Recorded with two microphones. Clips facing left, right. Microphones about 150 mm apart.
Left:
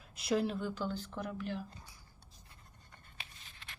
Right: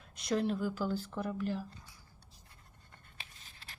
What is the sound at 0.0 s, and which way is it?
Speech, 5° left (ahead or behind).